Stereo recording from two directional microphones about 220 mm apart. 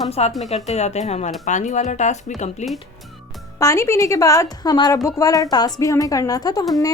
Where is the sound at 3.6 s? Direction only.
15° left (ahead or behind).